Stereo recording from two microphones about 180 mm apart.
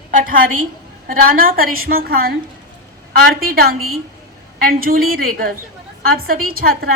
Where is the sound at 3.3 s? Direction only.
55° right (ahead or behind).